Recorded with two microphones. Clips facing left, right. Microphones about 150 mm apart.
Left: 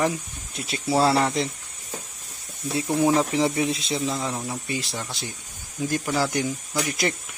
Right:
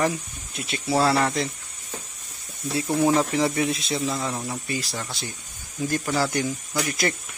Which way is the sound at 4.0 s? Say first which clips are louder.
Even; 10° left (ahead or behind).